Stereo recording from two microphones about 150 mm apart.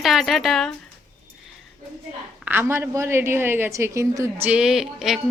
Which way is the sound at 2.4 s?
15° right (ahead or behind).